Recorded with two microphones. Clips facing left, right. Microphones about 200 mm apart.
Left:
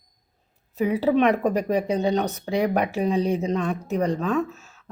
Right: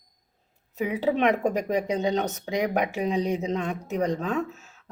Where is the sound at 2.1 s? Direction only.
20° right (ahead or behind).